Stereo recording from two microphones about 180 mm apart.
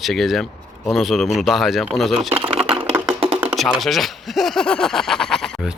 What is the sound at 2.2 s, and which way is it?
Speech, 30° right (ahead or behind).